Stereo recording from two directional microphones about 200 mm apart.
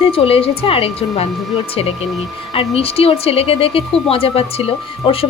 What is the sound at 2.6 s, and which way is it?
A woman's voice, 30° left (ahead or behind).